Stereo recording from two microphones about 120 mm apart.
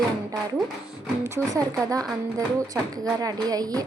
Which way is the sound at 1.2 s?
30° right (ahead or behind).